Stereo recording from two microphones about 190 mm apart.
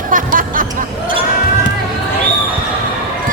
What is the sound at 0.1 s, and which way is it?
Music, 45° right (ahead or behind).